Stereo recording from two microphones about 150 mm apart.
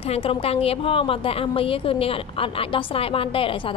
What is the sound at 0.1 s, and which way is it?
A woman's voice, 40° left (ahead or behind).